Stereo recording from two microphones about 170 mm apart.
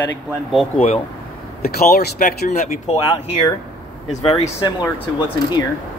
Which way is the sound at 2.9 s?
30° left (ahead or behind).